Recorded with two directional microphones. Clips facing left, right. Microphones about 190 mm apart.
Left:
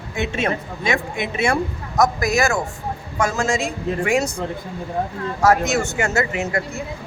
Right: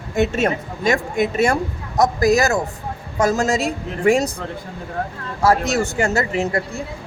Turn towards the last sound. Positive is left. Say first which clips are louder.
# right 2 dB
turn(degrees=-35)  # may be behind; listen again after turning